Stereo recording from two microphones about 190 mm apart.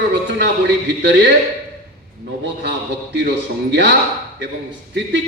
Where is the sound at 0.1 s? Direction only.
65° right (ahead or behind).